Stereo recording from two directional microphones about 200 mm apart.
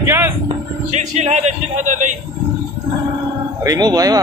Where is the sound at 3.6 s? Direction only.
20° right (ahead or behind).